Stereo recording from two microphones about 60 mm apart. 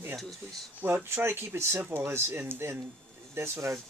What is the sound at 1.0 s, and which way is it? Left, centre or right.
Speech, right.